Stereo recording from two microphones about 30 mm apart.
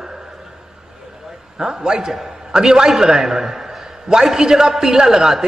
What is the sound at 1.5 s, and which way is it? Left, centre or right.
A man's voice, right.